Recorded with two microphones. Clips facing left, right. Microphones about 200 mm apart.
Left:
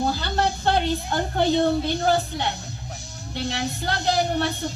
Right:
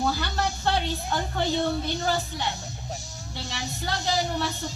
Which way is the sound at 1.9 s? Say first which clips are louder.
Left 5 dB; 60° left (ahead or behind).